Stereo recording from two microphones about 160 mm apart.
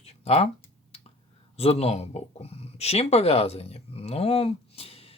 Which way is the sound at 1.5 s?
40° left (ahead or behind).